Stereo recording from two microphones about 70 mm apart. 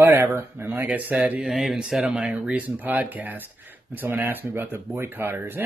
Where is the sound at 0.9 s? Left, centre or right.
Right.